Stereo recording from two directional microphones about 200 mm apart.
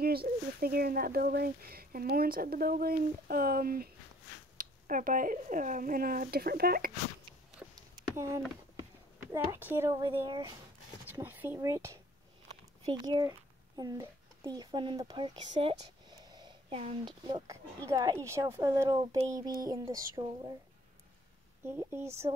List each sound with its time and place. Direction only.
0.0 s speech: 50° right (ahead or behind)
7.7 s a sound: 15° right (ahead or behind)
9.3 s speech: 10° right (ahead or behind)
21.6 s speech: 10° right (ahead or behind)